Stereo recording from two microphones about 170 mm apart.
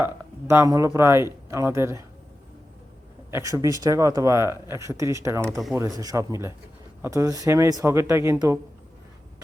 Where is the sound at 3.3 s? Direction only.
15° right (ahead or behind).